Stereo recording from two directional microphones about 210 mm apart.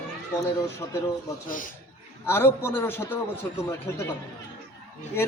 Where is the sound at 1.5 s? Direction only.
40° left (ahead or behind).